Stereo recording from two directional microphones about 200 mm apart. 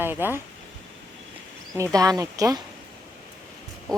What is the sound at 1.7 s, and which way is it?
Speech, 15° right (ahead or behind).